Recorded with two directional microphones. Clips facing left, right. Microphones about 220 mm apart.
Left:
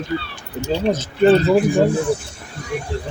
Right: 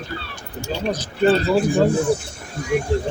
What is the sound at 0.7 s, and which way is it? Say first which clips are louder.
Speech: left 4 dB; 25° left (ahead or behind).